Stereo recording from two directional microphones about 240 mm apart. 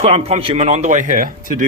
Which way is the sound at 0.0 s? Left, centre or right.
Right.